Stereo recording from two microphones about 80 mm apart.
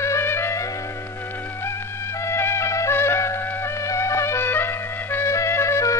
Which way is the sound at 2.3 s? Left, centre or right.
Left.